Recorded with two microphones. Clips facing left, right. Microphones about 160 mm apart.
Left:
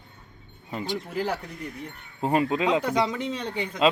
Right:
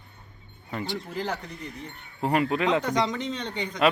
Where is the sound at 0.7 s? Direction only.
15° left (ahead or behind).